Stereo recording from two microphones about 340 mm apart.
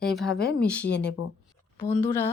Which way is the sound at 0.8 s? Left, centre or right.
Left.